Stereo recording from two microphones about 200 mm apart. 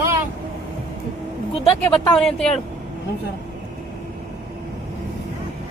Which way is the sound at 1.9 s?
Centre (ahead or behind).